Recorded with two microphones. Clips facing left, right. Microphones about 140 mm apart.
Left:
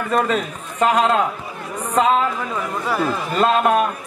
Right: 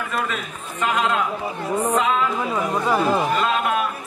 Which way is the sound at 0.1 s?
35° left (ahead or behind).